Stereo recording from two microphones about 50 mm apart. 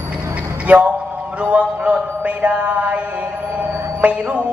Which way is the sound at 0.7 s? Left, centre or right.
Right.